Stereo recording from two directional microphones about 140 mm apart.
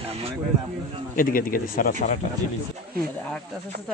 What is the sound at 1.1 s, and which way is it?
Speech, 85° left.